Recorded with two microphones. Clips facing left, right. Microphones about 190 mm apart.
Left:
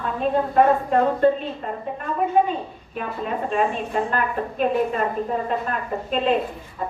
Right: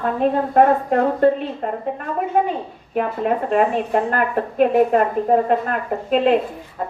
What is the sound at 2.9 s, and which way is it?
A woman's voice, 65° right (ahead or behind).